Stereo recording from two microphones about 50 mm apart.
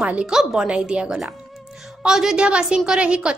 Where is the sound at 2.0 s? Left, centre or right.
Centre.